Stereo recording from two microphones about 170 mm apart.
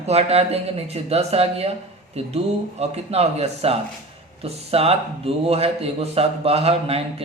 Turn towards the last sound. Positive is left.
turn(degrees=-35)  # may be behind; listen again after turning